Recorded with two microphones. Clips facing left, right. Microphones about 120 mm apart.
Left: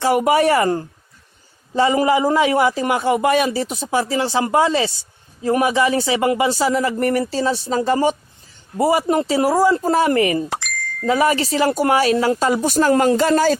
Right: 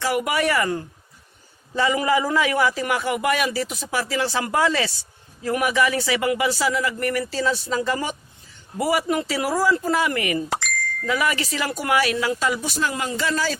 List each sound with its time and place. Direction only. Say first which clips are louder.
0.0 s a man's voice: left 7 dB; 30° left (ahead or behind); by 13.6 s 50° left (ahead or behind)